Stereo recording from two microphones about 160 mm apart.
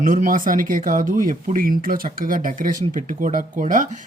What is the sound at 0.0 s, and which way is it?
Speech, 55° right (ahead or behind).